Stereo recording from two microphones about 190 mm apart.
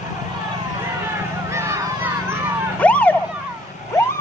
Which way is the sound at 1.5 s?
15° right (ahead or behind).